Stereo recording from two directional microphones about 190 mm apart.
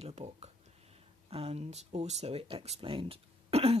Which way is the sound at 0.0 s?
35° right (ahead or behind).